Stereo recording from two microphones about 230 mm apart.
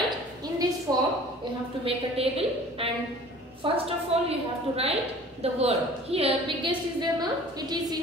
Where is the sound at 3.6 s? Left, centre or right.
Right.